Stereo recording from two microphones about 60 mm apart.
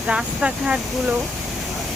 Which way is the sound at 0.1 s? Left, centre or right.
Centre.